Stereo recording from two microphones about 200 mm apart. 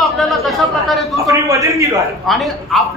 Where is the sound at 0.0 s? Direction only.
Centre (ahead or behind).